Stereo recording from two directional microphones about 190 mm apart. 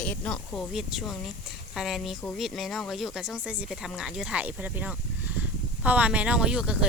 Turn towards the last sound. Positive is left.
turn(degrees=-5)  # may be behind; listen again after turning